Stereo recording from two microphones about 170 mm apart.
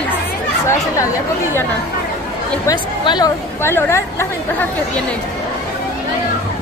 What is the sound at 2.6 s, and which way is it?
Speech, 25° left (ahead or behind).